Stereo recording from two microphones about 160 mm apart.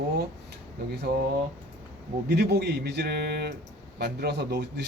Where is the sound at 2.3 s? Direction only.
90° right.